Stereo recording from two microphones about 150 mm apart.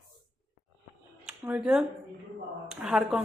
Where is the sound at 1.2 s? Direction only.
10° right (ahead or behind).